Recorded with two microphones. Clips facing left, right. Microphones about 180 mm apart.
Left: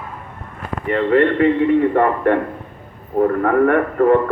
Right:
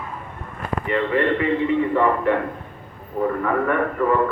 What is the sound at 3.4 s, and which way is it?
Speech, 55° left (ahead or behind).